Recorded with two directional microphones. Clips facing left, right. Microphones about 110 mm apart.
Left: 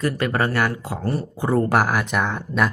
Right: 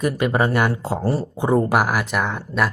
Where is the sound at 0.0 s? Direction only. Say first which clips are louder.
Right 2 dB; 20° right (ahead or behind).